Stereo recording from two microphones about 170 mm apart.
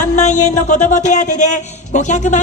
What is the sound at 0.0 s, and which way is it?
Speech, 45° left (ahead or behind).